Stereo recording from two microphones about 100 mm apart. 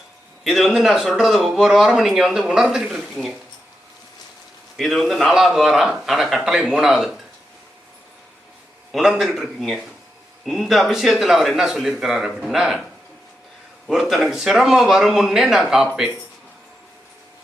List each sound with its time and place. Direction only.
0.4 s speech: centre (ahead or behind)
4.8 s speech: centre (ahead or behind)
8.9 s speech: 5° right (ahead or behind)